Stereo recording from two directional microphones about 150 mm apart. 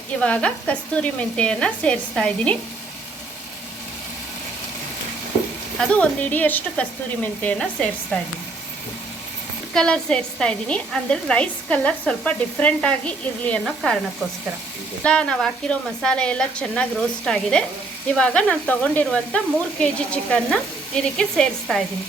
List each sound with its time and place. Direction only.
0.2 s a woman's voice: 10° left (ahead or behind)
5.9 s a woman's voice: 10° left (ahead or behind)
9.7 s a woman's voice: 5° left (ahead or behind)
15.0 s a woman's voice: 5° left (ahead or behind)
19.8 s sizzle: 5° left (ahead or behind)